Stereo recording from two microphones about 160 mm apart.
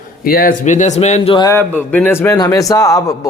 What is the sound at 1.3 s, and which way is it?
Speech, 25° left (ahead or behind).